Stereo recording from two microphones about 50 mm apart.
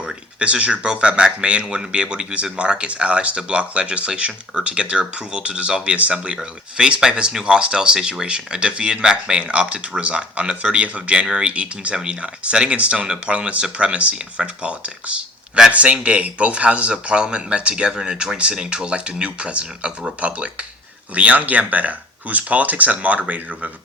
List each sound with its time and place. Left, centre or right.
0.0 s a man's voice: centre